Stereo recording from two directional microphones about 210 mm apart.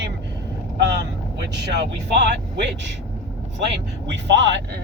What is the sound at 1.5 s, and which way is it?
Speech, 55° right (ahead or behind).